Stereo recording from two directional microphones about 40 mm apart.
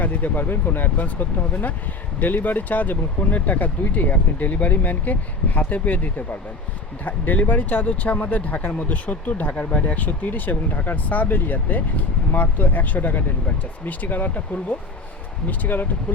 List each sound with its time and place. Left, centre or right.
0.0 s speech: left